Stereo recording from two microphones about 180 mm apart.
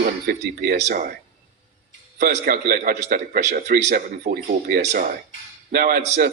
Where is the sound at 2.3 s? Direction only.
55° right (ahead or behind).